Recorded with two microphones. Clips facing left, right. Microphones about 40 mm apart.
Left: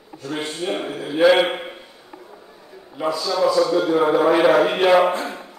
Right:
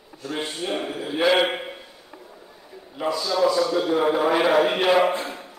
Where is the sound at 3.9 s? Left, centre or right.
Centre.